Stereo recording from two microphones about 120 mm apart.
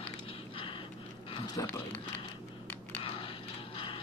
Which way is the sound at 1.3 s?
35° left (ahead or behind).